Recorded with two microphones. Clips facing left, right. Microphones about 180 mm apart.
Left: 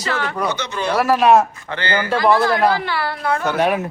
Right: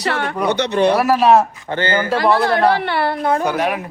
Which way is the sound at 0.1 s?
60° right (ahead or behind).